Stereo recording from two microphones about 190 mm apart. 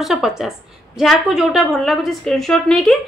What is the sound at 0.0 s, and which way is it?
A woman's voice, centre (ahead or behind).